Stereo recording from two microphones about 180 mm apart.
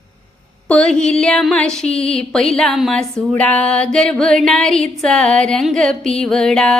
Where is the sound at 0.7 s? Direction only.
5° left (ahead or behind).